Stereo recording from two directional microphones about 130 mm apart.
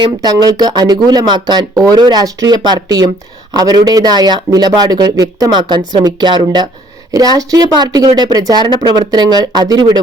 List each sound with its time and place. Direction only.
0.0 s speech: 30° right (ahead or behind)